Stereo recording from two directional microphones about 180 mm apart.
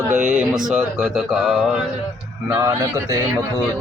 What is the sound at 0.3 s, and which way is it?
Speech, 5° right (ahead or behind).